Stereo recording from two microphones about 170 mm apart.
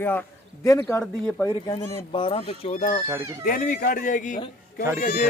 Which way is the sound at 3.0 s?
15° right (ahead or behind).